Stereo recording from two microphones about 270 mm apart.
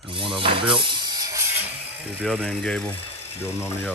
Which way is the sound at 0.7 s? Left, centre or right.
Centre.